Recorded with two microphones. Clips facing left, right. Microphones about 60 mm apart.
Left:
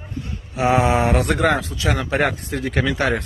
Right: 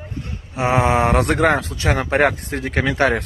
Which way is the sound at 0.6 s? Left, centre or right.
Right.